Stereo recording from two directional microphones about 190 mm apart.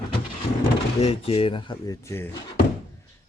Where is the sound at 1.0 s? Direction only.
30° left (ahead or behind); by 2.3 s 15° left (ahead or behind).